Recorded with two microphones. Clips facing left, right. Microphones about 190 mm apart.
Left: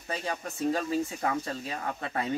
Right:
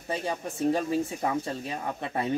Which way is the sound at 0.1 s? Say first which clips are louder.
Right 3 dB; 20° right (ahead or behind).